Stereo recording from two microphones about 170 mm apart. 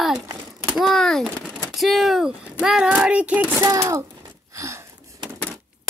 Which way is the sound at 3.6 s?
20° right (ahead or behind).